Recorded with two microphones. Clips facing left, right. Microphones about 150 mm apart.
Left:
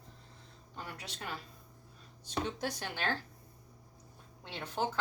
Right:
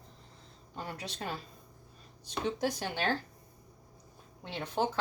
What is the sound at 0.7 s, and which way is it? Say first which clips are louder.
Speech: right 5 dB; 35° right (ahead or behind).